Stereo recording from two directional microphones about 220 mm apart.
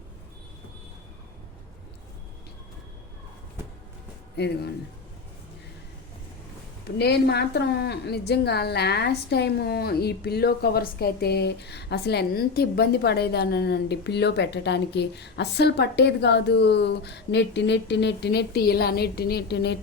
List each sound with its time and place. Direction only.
4.4 s a woman's voice: 50° left (ahead or behind)
6.9 s a woman's voice: 45° left (ahead or behind)